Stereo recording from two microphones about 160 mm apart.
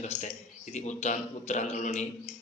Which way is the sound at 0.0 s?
45° left (ahead or behind).